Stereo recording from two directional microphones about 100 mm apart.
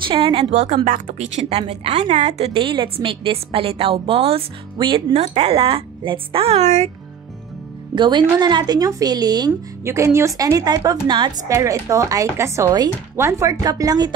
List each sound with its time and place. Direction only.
0.1 s a woman's voice: 55° right (ahead or behind)
0.6 s a woman's voice: 90° right; by 4.5 s 70° right (ahead or behind)
4.7 s a woman's voice: 55° right (ahead or behind)
5.1 s a woman's voice: 85° right
7.9 s a woman's voice: 50° right (ahead or behind)
9.8 s a woman's voice: 30° right (ahead or behind); by 11.3 s 50° right (ahead or behind)
11.4 s a woman's voice: 30° right (ahead or behind)